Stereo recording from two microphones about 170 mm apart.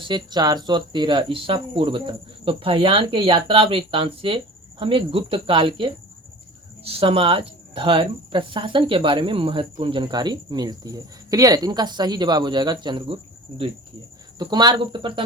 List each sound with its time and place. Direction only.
0.0 s speech: 25° right (ahead or behind)
14.3 s speech: 25° right (ahead or behind)